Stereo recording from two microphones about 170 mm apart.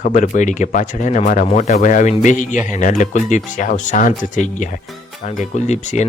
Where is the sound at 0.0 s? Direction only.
45° left (ahead or behind).